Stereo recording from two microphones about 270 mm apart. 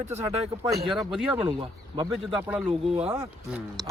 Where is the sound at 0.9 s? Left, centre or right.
Centre.